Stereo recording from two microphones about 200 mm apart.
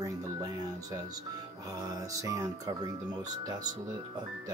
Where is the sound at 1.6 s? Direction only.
15° right (ahead or behind).